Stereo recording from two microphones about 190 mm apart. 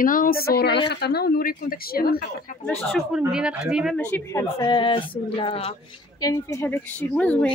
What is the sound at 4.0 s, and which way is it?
Speech, 10° left (ahead or behind).